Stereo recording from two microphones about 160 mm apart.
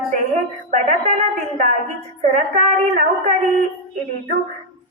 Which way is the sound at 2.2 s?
50° right (ahead or behind).